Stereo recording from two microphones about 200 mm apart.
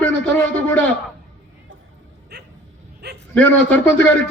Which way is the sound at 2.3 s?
55° right (ahead or behind).